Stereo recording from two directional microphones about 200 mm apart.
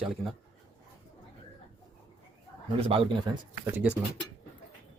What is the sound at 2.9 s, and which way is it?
Speech, 25° right (ahead or behind).